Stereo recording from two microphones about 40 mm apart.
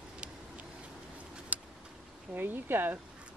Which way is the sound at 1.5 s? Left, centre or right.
Right.